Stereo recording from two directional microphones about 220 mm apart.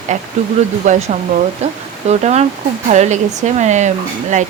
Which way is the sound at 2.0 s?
30° right (ahead or behind).